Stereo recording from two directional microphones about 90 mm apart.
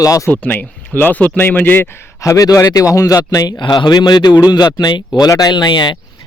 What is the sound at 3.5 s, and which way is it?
Speech, 60° left (ahead or behind).